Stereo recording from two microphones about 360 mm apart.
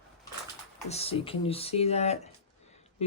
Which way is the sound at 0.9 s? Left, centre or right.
Centre.